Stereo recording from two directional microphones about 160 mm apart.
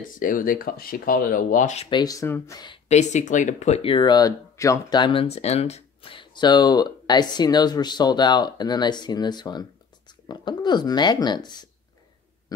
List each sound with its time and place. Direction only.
0.0 s speech: 55° left (ahead or behind)
1.9 s speech: 25° left (ahead or behind)
2.9 s speech: 45° left (ahead or behind); by 11.6 s 25° left (ahead or behind)